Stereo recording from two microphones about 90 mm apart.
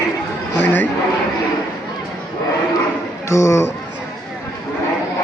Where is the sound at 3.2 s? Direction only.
30° left (ahead or behind).